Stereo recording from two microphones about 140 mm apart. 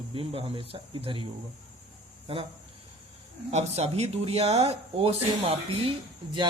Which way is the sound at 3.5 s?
50° right (ahead or behind).